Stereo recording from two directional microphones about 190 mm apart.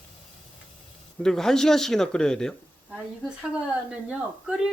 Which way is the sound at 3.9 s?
5° right (ahead or behind).